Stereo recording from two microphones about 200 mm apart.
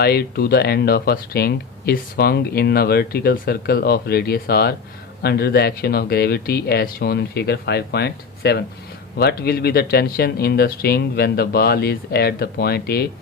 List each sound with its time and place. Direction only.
0.0 s speech: 50° left (ahead or behind)